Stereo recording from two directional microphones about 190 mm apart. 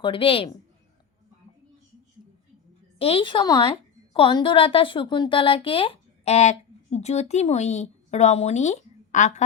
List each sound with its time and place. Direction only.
0.0 s a woman's voice: 25° left (ahead or behind)
3.0 s a woman's voice: 30° left (ahead or behind)